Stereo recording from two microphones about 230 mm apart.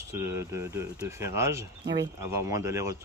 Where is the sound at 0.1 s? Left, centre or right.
Centre.